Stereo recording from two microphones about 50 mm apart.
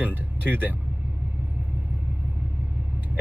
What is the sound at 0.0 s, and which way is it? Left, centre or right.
Vehicle, right.